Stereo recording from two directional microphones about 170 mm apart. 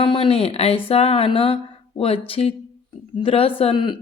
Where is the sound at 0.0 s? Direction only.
35° left (ahead or behind).